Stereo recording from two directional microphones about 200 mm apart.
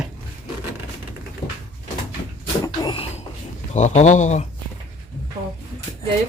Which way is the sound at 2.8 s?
30° left (ahead or behind).